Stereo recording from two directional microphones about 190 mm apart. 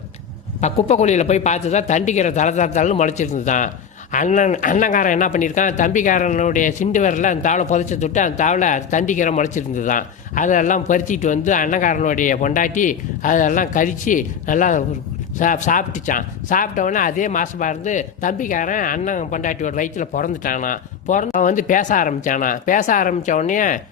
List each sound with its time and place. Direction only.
0.6 s a man's voice: 35° left (ahead or behind)